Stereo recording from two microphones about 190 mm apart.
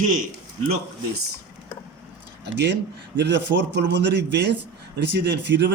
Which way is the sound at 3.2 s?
65° right (ahead or behind).